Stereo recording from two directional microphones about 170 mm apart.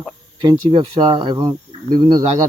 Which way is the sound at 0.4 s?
30° right (ahead or behind).